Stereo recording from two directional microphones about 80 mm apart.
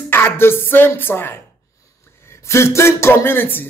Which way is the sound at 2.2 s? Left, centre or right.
Left.